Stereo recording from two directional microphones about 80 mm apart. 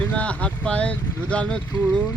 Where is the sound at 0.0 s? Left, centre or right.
Centre.